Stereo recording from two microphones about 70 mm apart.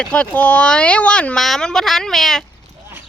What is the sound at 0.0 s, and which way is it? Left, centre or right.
Speech, centre.